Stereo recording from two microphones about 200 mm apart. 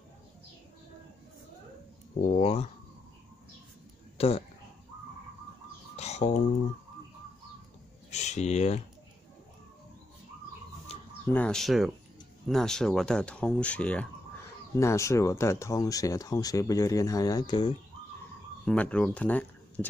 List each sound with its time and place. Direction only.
2.3 s speech: 35° left (ahead or behind)
4.2 s speech: 30° left (ahead or behind)
5.9 s a sound: 35° left (ahead or behind)
8.1 s speech: 35° left (ahead or behind)
10.9 s chicken: 30° left (ahead or behind)
11.3 s speech: 5° left (ahead or behind); by 17.7 s 20° left (ahead or behind)
18.7 s speech: 5° left (ahead or behind)